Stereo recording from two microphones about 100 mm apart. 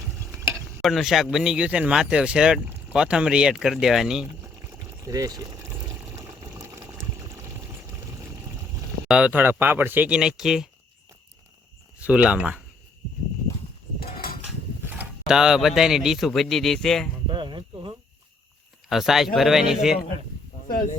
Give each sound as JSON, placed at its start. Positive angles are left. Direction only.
{"t": 0.8, "sound": "speech", "side_deg": 0}
{"t": 5.0, "sound": "speech", "side_deg": -40}
{"t": 6.1, "sound": "water", "side_deg": -35}
{"t": 9.0, "sound": "speech", "side_deg": -10}
{"t": 11.9, "sound": "speech", "side_deg": -15}
{"t": 15.3, "sound": "speech", "side_deg": -5}
{"t": 17.2, "sound": "a sound", "side_deg": -55}
{"t": 18.9, "sound": "speech", "side_deg": -5}